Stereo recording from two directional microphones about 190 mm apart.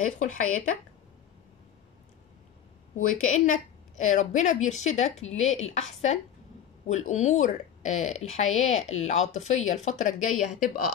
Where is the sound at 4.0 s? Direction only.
40° left (ahead or behind).